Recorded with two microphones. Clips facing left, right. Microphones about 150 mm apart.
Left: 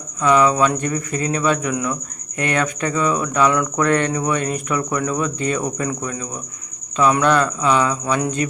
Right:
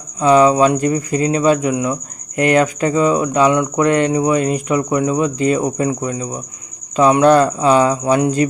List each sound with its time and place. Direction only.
0.2 s speech: 30° right (ahead or behind)